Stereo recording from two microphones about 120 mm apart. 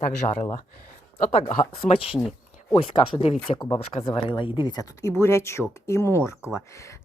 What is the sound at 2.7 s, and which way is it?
Speech, 50° left (ahead or behind).